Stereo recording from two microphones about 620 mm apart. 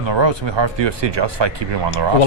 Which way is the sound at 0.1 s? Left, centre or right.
Right.